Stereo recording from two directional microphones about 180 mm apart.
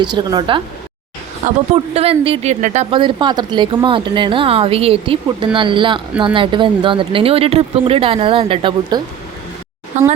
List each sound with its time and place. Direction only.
0.0 s speech: 25° right (ahead or behind); by 2.8 s 45° right (ahead or behind)
2.9 s speech: 25° right (ahead or behind)
9.9 s speech: 40° right (ahead or behind)